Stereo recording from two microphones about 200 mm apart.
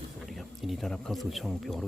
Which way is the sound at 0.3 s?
Centre (ahead or behind).